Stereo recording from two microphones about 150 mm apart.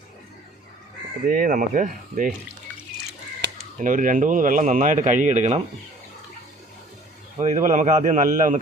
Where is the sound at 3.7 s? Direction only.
60° right (ahead or behind).